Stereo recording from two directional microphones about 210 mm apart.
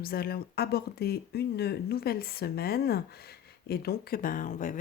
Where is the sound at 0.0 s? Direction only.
45° left (ahead or behind).